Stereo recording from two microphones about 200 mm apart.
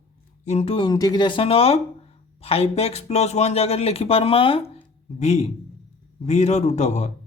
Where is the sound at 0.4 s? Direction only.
30° left (ahead or behind).